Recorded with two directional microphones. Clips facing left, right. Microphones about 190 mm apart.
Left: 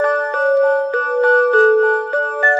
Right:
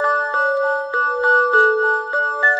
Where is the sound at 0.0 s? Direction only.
20° left (ahead or behind).